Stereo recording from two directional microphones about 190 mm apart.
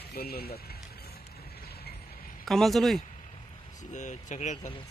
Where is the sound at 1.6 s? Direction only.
55° left (ahead or behind).